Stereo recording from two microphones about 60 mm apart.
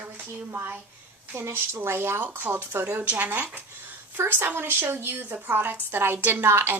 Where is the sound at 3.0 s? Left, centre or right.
Right.